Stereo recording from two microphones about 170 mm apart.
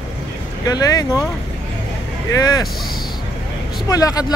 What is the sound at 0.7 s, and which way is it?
Speech, 20° left (ahead or behind).